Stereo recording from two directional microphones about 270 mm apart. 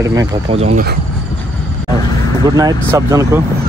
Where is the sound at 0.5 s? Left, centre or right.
Right.